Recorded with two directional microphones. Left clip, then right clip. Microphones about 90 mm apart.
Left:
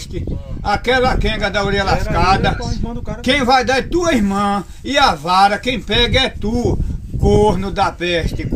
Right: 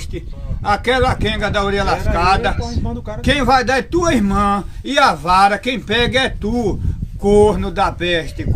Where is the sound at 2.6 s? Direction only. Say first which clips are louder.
Even; 35° right (ahead or behind).